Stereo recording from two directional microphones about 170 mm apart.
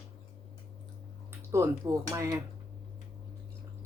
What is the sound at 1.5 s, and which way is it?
Speech, 20° right (ahead or behind).